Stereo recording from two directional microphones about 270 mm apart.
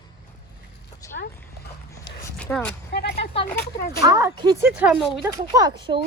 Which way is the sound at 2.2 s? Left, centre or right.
Centre.